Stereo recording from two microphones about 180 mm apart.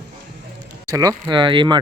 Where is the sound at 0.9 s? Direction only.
20° right (ahead or behind).